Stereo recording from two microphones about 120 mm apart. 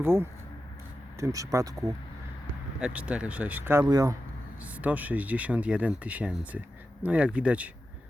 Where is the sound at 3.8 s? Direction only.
30° right (ahead or behind).